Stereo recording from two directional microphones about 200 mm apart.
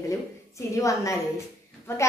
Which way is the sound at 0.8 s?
15° left (ahead or behind).